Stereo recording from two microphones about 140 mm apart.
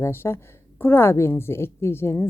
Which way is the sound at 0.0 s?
15° left (ahead or behind).